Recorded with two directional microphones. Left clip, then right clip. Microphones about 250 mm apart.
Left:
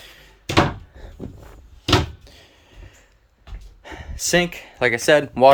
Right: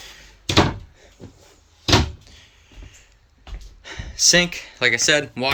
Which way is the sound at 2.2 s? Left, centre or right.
Left.